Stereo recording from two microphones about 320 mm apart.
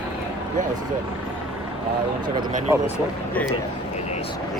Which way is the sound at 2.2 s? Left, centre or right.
Centre.